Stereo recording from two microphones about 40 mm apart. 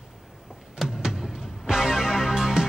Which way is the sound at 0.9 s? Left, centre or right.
Centre.